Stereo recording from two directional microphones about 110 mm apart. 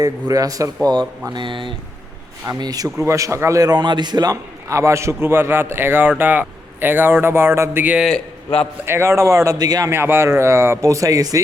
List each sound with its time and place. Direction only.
0.0 s speech: 35° right (ahead or behind)
1.3 s speech: 45° right (ahead or behind)
2.5 s speech: 35° right (ahead or behind); by 7.9 s 20° right (ahead or behind)
7.9 s a man's voice: centre (ahead or behind)
8.8 s speech: 20° right (ahead or behind)
9.9 s speech: 20° right (ahead or behind)